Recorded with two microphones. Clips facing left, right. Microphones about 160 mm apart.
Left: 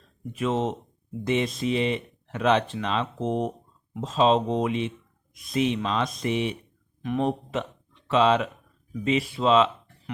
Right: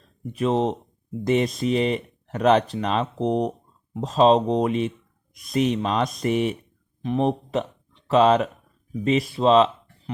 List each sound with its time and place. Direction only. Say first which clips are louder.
0.3 s speech: right 4 dB; 35° right (ahead or behind)
7.0 s speech: right 3 dB; 30° right (ahead or behind)